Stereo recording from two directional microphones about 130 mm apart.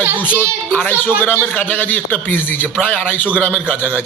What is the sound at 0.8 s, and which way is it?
Speech, 15° left (ahead or behind).